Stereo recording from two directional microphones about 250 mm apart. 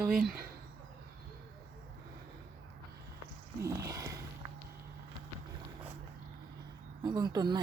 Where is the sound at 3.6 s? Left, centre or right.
Centre.